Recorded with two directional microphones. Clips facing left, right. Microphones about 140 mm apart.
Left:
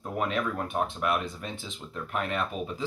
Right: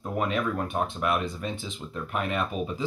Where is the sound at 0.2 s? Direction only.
Centre (ahead or behind).